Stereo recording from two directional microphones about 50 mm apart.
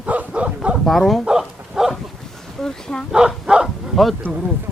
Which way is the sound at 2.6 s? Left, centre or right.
Centre.